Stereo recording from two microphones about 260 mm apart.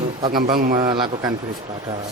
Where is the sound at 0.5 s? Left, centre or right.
Right.